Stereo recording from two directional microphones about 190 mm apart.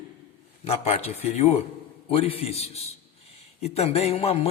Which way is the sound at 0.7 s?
35° left (ahead or behind).